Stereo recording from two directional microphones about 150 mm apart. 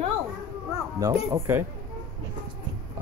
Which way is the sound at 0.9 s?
20° right (ahead or behind).